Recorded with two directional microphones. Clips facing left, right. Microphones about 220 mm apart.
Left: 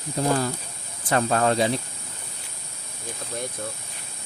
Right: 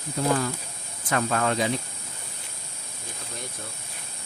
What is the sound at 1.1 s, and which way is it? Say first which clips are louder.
Speech: left 3 dB; 35° left (ahead or behind).